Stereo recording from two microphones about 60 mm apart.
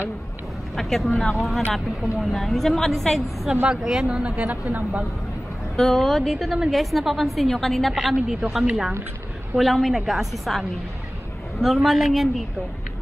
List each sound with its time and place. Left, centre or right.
0.7 s a woman's voice: centre
3.6 s a woman's voice: centre
4.2 s a woman's voice: right
5.8 s a woman's voice: centre
6.3 s a woman's voice: centre